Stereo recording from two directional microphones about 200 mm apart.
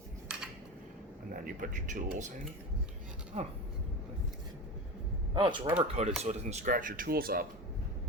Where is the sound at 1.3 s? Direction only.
45° right (ahead or behind).